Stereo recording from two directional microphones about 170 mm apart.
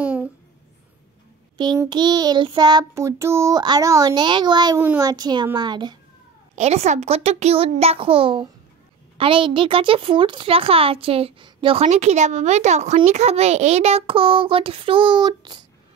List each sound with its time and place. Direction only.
0.0 s a sound: 10° right (ahead or behind)
1.6 s child singing: 25° right (ahead or behind)
4.7 s child singing: 15° right (ahead or behind)
6.5 s speech: 40° right (ahead or behind)